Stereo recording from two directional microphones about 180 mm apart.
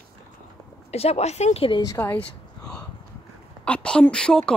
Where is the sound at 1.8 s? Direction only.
15° left (ahead or behind).